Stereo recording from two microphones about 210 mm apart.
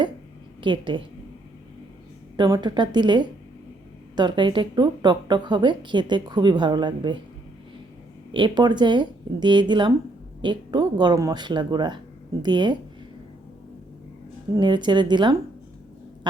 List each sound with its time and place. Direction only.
0.6 s speech: 25° right (ahead or behind)
2.3 s speech: 20° right (ahead or behind)
8.3 s speech: 20° right (ahead or behind)
14.5 s speech: 20° right (ahead or behind)